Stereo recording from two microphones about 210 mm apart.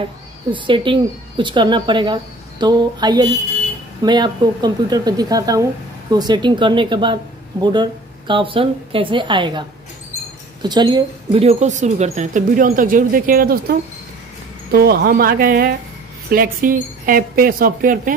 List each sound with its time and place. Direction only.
0.5 s a woman's voice: 25° right (ahead or behind); by 18.1 s 40° right (ahead or behind)